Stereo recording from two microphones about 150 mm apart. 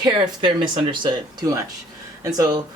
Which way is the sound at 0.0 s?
35° right (ahead or behind).